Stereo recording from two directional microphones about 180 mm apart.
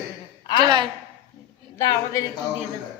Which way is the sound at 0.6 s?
25° right (ahead or behind).